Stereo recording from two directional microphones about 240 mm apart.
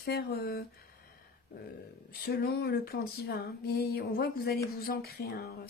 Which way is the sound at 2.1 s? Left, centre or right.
Left.